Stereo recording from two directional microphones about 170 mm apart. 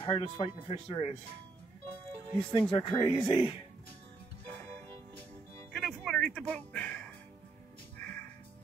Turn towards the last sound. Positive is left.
turn(degrees=10)  # may be behind; listen again after turning